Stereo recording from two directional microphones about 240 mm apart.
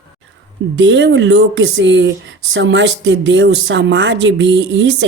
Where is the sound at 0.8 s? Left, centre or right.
Right.